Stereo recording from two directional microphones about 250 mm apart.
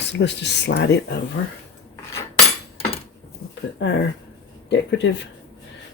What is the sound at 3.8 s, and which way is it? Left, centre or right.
Speech, left.